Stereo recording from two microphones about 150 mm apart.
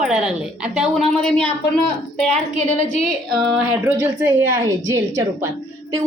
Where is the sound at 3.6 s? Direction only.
15° right (ahead or behind).